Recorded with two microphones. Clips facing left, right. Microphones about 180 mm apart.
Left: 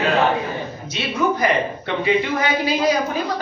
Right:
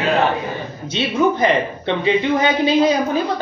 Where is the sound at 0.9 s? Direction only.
25° right (ahead or behind).